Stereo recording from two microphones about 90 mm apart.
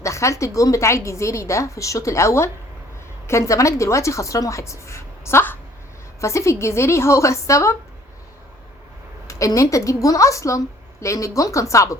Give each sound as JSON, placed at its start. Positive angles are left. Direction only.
{"t": 0.0, "sound": "a woman's voice", "side_deg": 35}
{"t": 9.2, "sound": "a woman's voice", "side_deg": 40}